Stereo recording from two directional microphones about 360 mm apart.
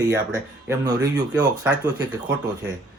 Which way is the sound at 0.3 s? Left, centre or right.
Centre.